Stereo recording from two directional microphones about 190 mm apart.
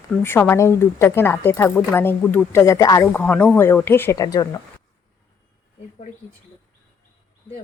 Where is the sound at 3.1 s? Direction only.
10° left (ahead or behind).